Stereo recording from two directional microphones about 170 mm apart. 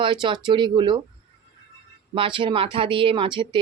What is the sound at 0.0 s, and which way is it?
Speech, 30° right (ahead or behind).